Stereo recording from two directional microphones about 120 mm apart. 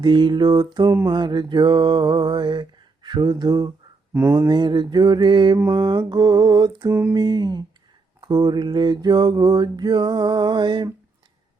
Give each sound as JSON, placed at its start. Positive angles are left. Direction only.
{"t": 0.0, "sound": "mantra", "side_deg": -40}
{"t": 4.1, "sound": "speech", "side_deg": -20}
{"t": 4.4, "sound": "mantra", "side_deg": -40}
{"t": 5.5, "sound": "mantra", "side_deg": -30}